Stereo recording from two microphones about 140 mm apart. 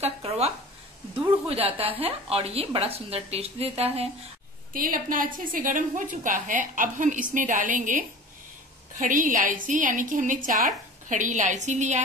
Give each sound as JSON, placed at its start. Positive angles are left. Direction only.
{"t": 0.0, "sound": "a sound", "side_deg": -50}
{"t": 1.3, "sound": "a woman's voice", "side_deg": -45}
{"t": 4.7, "sound": "a woman's voice", "side_deg": -85}